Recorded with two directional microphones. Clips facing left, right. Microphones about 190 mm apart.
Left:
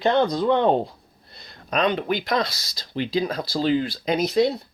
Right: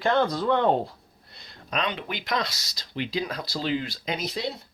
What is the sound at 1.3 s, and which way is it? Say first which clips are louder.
Speech: left 6 dB; 40° left (ahead or behind).